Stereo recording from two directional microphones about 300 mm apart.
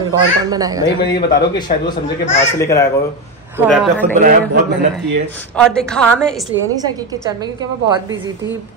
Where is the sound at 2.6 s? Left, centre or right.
Centre.